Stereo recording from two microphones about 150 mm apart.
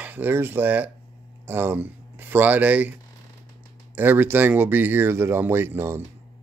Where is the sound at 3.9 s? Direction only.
15° right (ahead or behind).